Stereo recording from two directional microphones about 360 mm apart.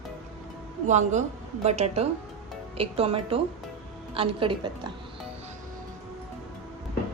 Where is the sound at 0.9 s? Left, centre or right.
Centre.